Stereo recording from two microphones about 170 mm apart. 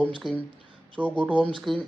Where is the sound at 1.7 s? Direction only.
Centre (ahead or behind).